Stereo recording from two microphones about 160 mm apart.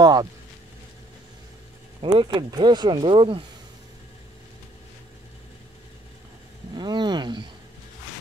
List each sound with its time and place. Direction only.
0.0 s speech: 25° right (ahead or behind)
2.1 s speech: 25° right (ahead or behind)
6.7 s speech: 25° right (ahead or behind)